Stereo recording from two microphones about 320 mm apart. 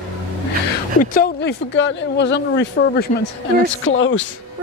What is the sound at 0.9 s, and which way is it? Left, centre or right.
Speech, left.